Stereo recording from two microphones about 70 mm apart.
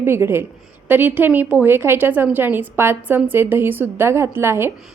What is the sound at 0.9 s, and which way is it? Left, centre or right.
A woman's voice, right.